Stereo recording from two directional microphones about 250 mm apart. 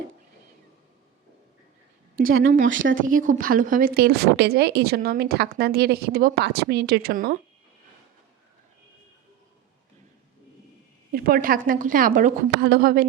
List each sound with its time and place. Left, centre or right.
2.6 s speech: right
2.9 s a woman's voice: right
11.1 s a woman's voice: right